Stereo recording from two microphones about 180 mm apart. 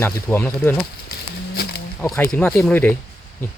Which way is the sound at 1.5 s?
60° left (ahead or behind).